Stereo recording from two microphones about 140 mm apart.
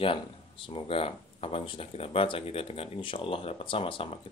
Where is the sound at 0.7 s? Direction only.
40° left (ahead or behind).